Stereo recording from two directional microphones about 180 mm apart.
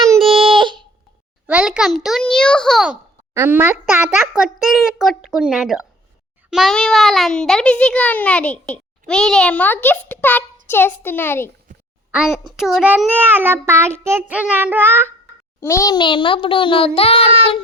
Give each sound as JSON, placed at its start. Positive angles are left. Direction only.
{"t": 0.2, "sound": "a sound", "side_deg": -30}
{"t": 1.5, "sound": "a child's voice", "side_deg": -5}
{"t": 3.3, "sound": "child singing", "side_deg": -15}
{"t": 4.4, "sound": "a child's voice", "side_deg": 0}
{"t": 12.5, "sound": "child singing", "side_deg": 0}
{"t": 15.6, "sound": "a child's voice", "side_deg": 15}